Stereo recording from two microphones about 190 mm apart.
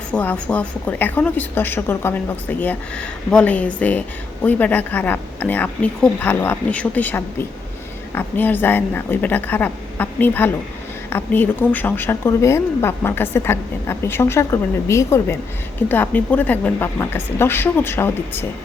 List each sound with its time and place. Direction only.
0.1 s a woman's voice: 5° left (ahead or behind)